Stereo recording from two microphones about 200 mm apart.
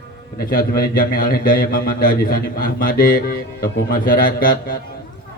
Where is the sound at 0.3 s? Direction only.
50° left (ahead or behind).